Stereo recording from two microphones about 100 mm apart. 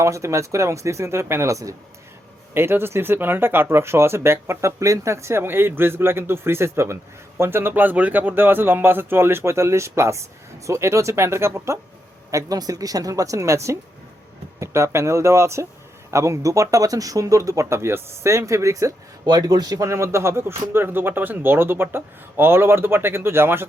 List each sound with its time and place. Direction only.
0.0 s a woman's voice: 30° right (ahead or behind)